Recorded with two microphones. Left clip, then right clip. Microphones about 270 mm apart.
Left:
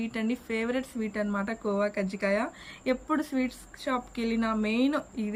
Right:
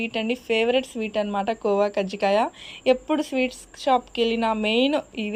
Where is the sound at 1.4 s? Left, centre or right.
Right.